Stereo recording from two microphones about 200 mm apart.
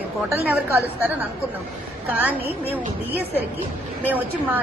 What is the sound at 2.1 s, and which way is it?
Speech, 10° right (ahead or behind).